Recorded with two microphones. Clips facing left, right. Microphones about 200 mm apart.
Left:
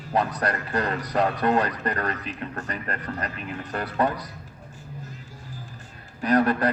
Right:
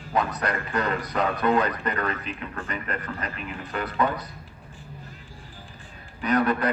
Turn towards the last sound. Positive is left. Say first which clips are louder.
# left 2 dB
turn(degrees=35)  # may be behind; listen again after turning